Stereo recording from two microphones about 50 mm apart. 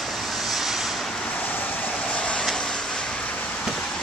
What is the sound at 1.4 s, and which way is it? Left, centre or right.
Vehicle, left.